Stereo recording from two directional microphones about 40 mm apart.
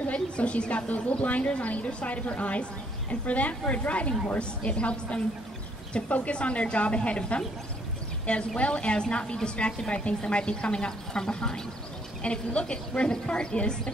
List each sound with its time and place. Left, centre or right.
0.0 s a woman's voice: left